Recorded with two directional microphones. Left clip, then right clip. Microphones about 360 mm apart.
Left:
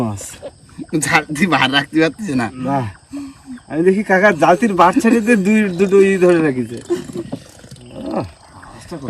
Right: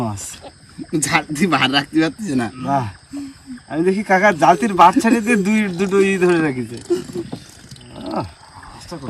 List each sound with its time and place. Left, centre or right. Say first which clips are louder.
0.0 s a man's voice: left 2 dB; centre
8.0 s wild animals: left 2 dB; centre